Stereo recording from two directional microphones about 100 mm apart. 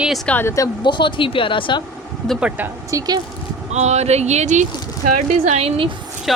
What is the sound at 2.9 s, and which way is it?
Speech, 40° right (ahead or behind).